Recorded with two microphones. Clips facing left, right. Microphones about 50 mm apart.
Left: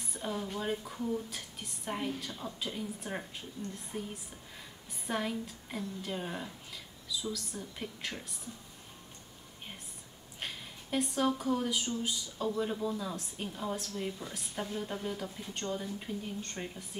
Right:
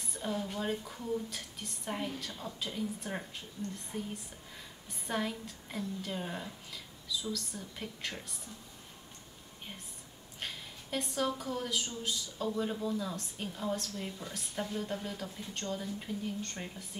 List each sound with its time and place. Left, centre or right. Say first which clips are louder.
0.0 s a woman's voice: right 1 dB; centre
10.4 s a woman's voice: left 1 dB; centre